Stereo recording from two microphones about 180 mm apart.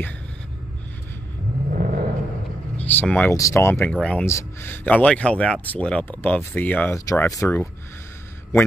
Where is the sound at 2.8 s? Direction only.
10° left (ahead or behind).